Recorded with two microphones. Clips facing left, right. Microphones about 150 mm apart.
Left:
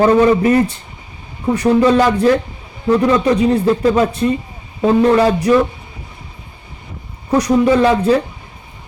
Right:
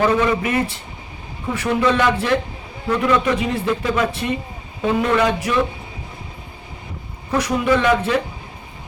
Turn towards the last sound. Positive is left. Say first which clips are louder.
# left 5 dB
turn(degrees=30)  # may be behind; listen again after turning